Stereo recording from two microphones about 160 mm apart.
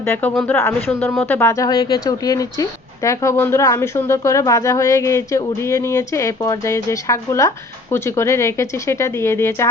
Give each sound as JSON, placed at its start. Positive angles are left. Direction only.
{"t": 0.0, "sound": "speech", "side_deg": 10}